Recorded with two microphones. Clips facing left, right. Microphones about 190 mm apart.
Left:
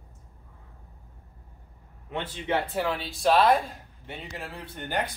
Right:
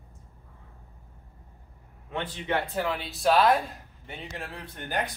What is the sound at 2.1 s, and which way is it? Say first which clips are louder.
Speech: even; 20° left (ahead or behind).